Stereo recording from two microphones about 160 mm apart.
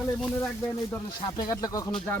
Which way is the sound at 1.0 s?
25° left (ahead or behind).